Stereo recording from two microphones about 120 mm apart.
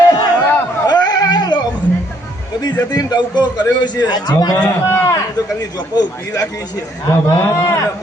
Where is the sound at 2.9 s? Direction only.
35° left (ahead or behind).